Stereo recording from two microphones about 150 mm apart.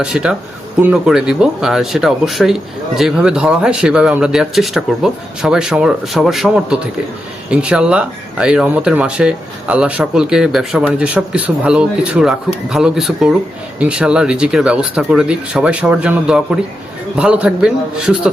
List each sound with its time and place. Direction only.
0.0 s speech: 5° right (ahead or behind)